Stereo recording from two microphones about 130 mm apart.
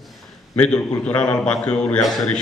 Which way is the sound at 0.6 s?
10° left (ahead or behind).